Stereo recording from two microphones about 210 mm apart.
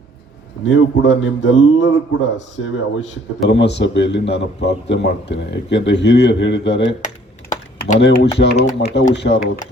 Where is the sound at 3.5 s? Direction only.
55° left (ahead or behind).